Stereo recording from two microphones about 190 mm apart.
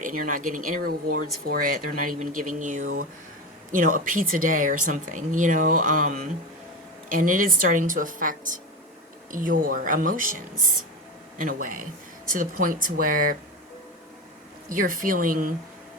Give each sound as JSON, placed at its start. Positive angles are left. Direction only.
{"t": 0.0, "sound": "speech", "side_deg": -45}
{"t": 14.7, "sound": "speech", "side_deg": -45}